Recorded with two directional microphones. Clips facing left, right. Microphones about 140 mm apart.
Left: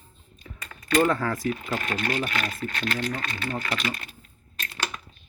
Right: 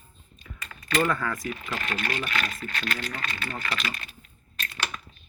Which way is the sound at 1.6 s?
20° left (ahead or behind).